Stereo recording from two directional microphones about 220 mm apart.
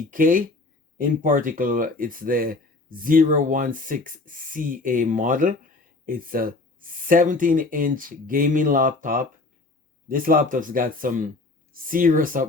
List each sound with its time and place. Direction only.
0.0 s speech: 40° right (ahead or behind)